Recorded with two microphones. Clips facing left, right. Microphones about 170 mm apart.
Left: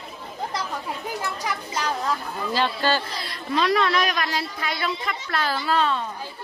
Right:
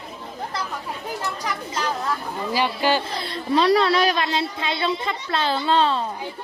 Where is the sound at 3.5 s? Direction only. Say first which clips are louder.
Right 4 dB; 30° right (ahead or behind).